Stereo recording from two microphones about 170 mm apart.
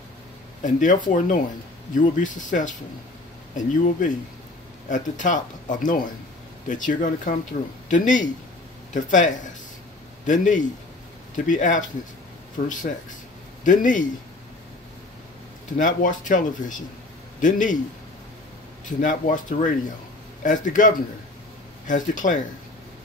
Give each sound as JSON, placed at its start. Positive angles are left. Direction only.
{"t": 0.6, "sound": "speech", "side_deg": 50}
{"t": 2.0, "sound": "a man's voice", "side_deg": 50}
{"t": 15.8, "sound": "speech", "side_deg": 50}
{"t": 18.9, "sound": "speech", "side_deg": 50}